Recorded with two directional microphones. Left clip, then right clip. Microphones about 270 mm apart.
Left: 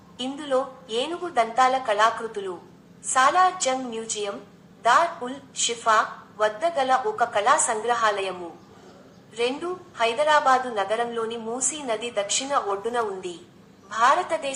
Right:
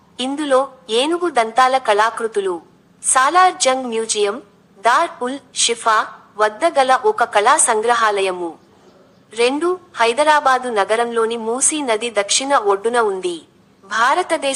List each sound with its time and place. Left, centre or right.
0.2 s a woman's voice: right